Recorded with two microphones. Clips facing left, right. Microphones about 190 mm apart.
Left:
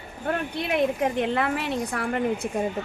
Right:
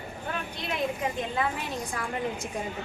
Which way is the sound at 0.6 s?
60° left (ahead or behind).